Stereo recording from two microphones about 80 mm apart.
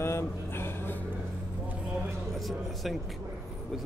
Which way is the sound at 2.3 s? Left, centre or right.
Centre.